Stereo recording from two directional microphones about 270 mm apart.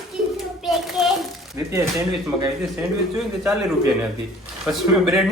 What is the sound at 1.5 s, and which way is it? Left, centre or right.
Speech, centre.